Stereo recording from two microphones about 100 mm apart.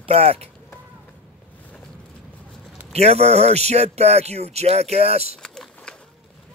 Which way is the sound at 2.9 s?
90° right.